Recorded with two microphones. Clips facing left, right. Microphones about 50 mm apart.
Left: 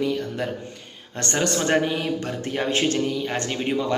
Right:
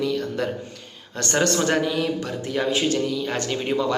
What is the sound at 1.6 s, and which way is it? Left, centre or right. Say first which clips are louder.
Speech: even; left.